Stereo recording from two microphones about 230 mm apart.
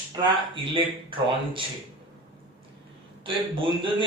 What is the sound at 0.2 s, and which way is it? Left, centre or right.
Speech, right.